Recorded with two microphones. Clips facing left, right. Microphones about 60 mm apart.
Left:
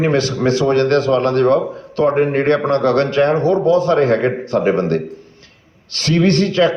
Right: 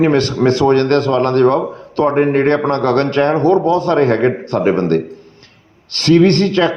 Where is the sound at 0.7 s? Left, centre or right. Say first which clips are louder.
Right 1 dB; right.